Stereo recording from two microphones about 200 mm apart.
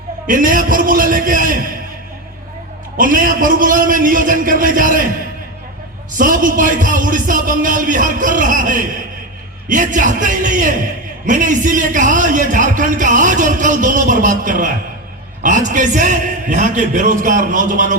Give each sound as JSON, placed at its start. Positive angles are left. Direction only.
{"t": 0.3, "sound": "a man's voice", "side_deg": -40}
{"t": 3.0, "sound": "a man's voice", "side_deg": -45}
{"t": 6.1, "sound": "a man's voice", "side_deg": -40}